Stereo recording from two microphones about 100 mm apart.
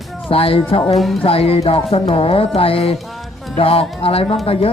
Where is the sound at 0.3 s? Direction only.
65° left (ahead or behind).